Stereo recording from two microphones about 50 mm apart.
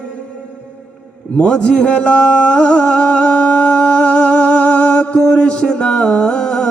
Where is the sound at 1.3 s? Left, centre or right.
Left.